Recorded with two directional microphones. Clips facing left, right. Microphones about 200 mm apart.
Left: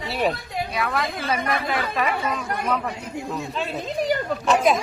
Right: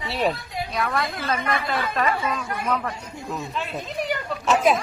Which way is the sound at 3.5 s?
35° left (ahead or behind).